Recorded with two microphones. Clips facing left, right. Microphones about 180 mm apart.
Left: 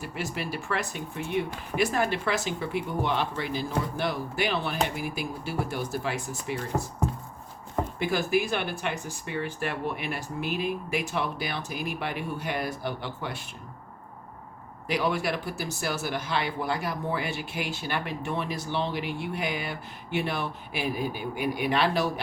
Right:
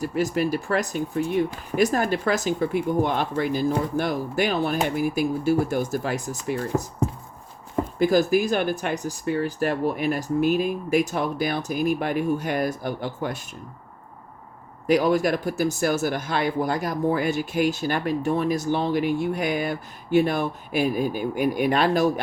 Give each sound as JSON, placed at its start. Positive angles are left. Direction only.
{"t": 0.0, "sound": "speech", "side_deg": -40}
{"t": 7.9, "sound": "speech", "side_deg": -40}
{"t": 14.8, "sound": "speech", "side_deg": -45}